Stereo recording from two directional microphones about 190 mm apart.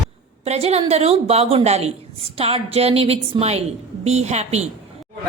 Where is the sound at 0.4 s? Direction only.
35° right (ahead or behind).